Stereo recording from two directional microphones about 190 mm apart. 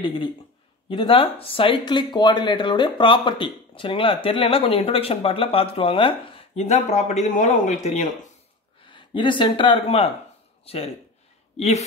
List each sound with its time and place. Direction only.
0.0 s speech: 25° left (ahead or behind)
8.8 s speech: 25° left (ahead or behind)